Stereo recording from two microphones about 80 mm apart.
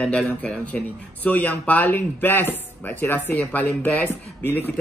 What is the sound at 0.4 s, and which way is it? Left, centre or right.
Speech, centre.